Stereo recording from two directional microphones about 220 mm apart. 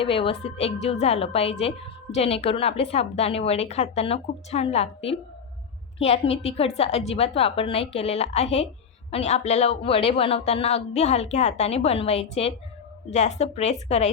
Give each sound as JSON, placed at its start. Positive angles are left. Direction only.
{"t": 0.0, "sound": "a woman's voice", "side_deg": 25}